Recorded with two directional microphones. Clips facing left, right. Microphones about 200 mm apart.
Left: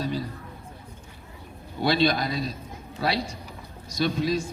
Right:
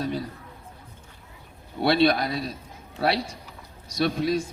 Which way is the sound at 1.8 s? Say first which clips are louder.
Right 2 dB; 55° right (ahead or behind).